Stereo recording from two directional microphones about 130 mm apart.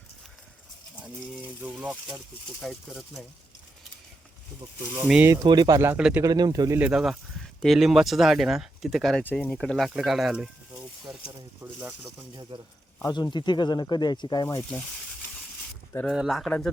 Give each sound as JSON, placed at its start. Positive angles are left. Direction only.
{"t": 1.6, "sound": "speech", "side_deg": -10}
{"t": 5.2, "sound": "speech", "side_deg": -25}
{"t": 6.0, "sound": "speech", "side_deg": -5}
{"t": 6.2, "sound": "speech", "side_deg": -30}
{"t": 6.7, "sound": "speech", "side_deg": -10}
{"t": 9.2, "sound": "speech", "side_deg": 15}
{"t": 11.6, "sound": "speech", "side_deg": -5}
{"t": 12.5, "sound": "a man's voice", "side_deg": -40}
{"t": 13.0, "sound": "speech", "side_deg": 25}
{"t": 16.0, "sound": "speech", "side_deg": 0}